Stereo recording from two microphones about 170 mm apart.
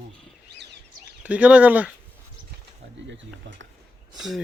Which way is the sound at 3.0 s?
90° right.